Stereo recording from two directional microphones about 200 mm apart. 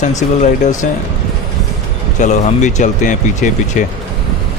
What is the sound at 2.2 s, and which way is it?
Speech, 35° left (ahead or behind).